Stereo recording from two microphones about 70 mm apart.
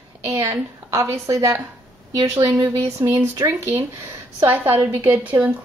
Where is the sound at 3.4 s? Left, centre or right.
Right.